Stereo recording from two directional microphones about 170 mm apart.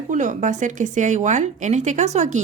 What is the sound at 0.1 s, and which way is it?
Speech, 45° right (ahead or behind).